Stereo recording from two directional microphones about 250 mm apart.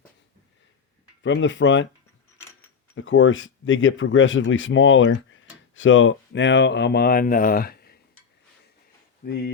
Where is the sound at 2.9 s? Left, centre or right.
Left.